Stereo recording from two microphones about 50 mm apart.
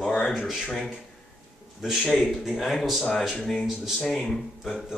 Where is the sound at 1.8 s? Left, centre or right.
Centre.